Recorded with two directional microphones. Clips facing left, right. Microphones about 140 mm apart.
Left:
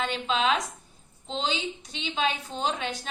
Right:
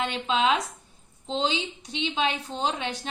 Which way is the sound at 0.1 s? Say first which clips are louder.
Right 2 dB; 20° right (ahead or behind).